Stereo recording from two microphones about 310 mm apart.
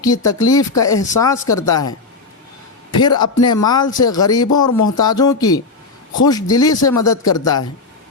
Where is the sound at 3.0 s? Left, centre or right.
Centre.